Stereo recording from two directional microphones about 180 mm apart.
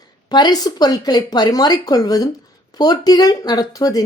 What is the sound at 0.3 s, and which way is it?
Speech, 25° left (ahead or behind).